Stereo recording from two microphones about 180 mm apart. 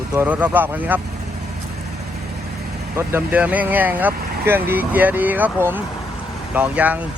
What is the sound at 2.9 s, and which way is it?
Speech, 10° right (ahead or behind).